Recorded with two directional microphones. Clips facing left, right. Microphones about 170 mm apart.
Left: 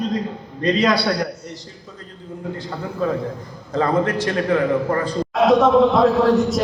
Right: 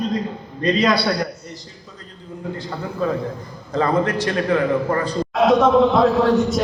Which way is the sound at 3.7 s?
50° left (ahead or behind).